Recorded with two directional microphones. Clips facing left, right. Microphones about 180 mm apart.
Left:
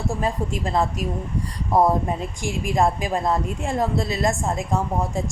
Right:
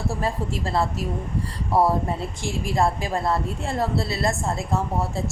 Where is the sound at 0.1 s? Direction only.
15° left (ahead or behind).